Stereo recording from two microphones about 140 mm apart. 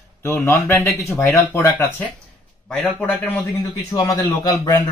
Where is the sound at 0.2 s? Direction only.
20° left (ahead or behind).